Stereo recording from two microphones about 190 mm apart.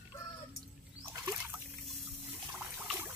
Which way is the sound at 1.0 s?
10° right (ahead or behind).